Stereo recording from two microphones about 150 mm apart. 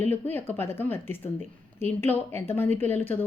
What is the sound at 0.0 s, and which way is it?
A woman's voice, 15° left (ahead or behind).